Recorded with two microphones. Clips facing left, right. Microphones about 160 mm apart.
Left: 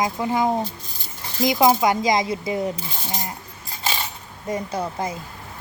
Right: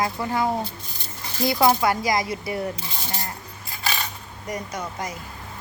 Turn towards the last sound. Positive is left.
turn(degrees=30)  # may be behind; listen again after turning